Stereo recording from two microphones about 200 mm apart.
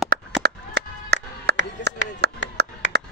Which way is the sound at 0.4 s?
55° right (ahead or behind).